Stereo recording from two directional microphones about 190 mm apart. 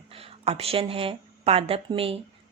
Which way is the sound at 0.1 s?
30° right (ahead or behind).